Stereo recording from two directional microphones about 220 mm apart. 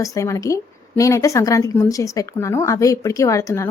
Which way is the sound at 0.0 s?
15° left (ahead or behind).